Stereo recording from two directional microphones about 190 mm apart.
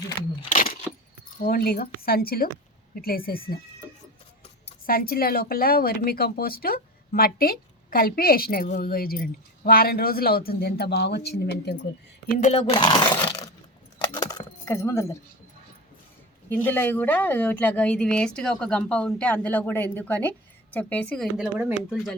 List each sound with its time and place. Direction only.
0.5 s a sound: 45° left (ahead or behind)
1.5 s speech: 50° left (ahead or behind)
4.9 s speech: 50° left (ahead or behind)
12.4 s speech: 35° left (ahead or behind); by 13.5 s 20° left (ahead or behind)
14.0 s keys jangling: 20° left (ahead or behind)
16.5 s a woman's voice: 10° left (ahead or behind)
21.3 s speech: 5° right (ahead or behind)